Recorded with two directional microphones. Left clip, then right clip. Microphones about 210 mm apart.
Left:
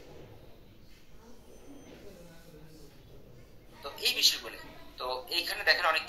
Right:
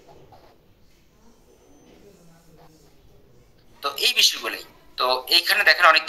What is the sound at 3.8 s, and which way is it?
A man's voice, 45° right (ahead or behind).